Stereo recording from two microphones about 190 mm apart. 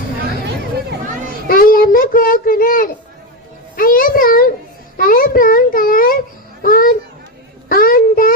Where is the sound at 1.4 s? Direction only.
50° left (ahead or behind).